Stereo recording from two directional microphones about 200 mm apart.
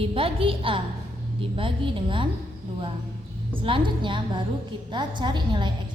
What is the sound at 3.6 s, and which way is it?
A woman's voice, 25° right (ahead or behind).